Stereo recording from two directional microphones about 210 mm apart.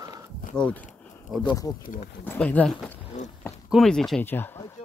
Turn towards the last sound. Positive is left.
turn(degrees=10)  # may be behind; listen again after turning